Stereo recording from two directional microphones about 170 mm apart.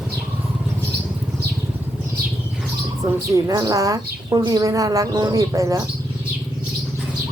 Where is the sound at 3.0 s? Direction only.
20° right (ahead or behind).